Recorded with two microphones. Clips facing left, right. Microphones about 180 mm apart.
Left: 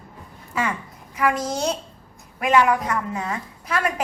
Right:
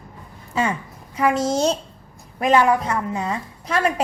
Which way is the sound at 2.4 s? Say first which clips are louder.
Right 2 dB; 35° right (ahead or behind).